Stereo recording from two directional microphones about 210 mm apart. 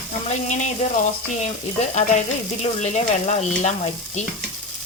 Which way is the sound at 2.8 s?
35° left (ahead or behind).